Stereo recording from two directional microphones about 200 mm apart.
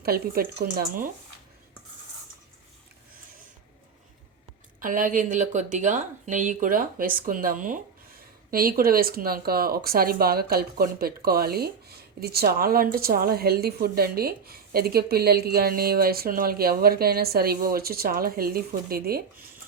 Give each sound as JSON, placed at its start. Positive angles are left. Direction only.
{"t": 0.0, "sound": "speech", "side_deg": -50}
{"t": 4.8, "sound": "speech", "side_deg": -40}